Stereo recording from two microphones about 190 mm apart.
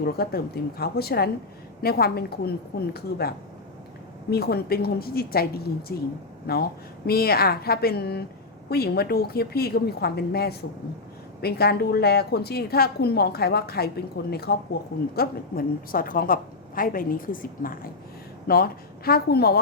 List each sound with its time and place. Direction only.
0.0 s a woman's voice: 55° left (ahead or behind)